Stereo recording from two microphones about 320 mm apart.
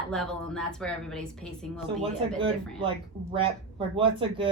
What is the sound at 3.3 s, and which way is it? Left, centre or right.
Speech, centre.